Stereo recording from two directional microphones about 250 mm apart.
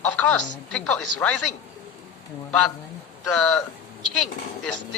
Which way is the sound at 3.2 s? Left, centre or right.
Centre.